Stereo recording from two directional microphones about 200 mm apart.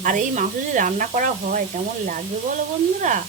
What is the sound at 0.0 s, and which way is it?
Speech, 40° right (ahead or behind).